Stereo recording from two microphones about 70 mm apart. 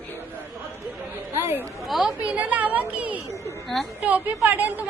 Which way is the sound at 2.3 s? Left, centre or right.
Right.